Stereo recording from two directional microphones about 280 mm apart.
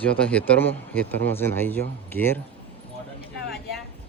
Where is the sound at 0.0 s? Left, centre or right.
Centre.